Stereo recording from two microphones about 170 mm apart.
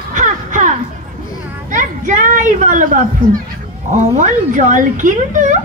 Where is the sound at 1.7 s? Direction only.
50° right (ahead or behind).